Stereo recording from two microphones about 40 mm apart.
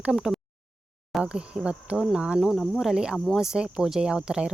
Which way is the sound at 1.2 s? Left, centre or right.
Right.